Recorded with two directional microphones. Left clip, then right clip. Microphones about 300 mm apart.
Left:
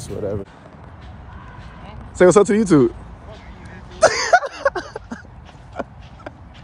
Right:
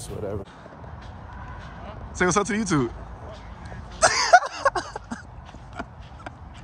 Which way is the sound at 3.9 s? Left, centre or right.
Centre.